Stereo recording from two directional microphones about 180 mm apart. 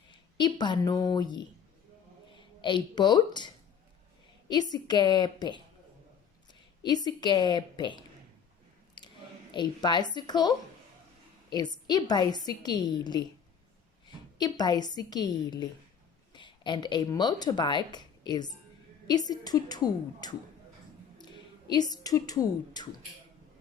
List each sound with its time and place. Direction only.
0.1 s a woman's voice: 25° left (ahead or behind)
9.0 s a sound: 25° left (ahead or behind)
9.5 s a woman's voice: 25° left (ahead or behind)
11.5 s a woman's voice: 25° left (ahead or behind)
14.3 s a woman's voice: 25° left (ahead or behind)
21.7 s a woman's voice: 20° left (ahead or behind)